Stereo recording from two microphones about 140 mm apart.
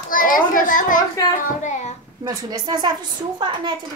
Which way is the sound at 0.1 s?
80° left.